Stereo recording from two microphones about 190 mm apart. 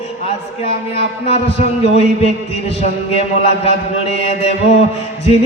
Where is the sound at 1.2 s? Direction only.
35° left (ahead or behind).